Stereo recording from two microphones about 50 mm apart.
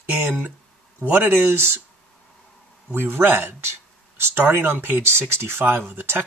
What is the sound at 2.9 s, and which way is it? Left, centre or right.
Speech, right.